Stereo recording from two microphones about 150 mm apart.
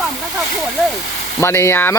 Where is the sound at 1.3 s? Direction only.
15° left (ahead or behind).